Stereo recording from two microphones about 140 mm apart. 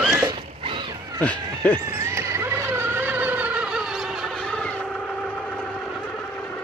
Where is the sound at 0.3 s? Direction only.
40° right (ahead or behind).